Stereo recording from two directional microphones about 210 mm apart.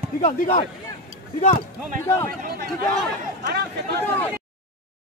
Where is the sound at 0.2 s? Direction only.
40° left (ahead or behind).